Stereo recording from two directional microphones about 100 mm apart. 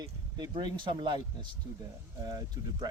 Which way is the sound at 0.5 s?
50° right (ahead or behind).